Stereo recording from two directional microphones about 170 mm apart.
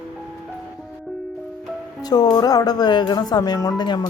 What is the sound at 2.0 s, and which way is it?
Speech, 25° left (ahead or behind).